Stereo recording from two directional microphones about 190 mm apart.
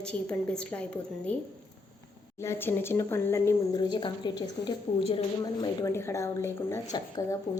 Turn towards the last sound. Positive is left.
turn(degrees=20)  # may be behind; listen again after turning